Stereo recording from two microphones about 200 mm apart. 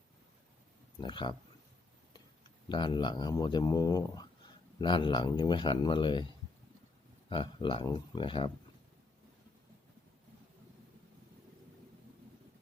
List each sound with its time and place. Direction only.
1.0 s speech: 25° left (ahead or behind)
2.6 s speech: 20° left (ahead or behind)
7.3 s speech: 25° left (ahead or behind)